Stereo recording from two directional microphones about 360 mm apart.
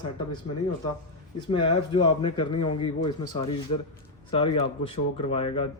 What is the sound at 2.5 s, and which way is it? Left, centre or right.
Speech, left.